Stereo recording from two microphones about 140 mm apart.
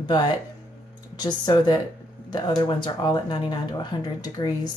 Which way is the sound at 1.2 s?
30° left (ahead or behind).